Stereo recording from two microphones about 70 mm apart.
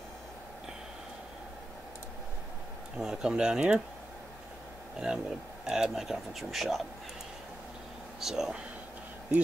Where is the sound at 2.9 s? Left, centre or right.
Centre.